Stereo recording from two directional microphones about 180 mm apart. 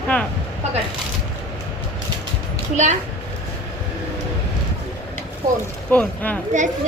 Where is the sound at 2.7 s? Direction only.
40° right (ahead or behind).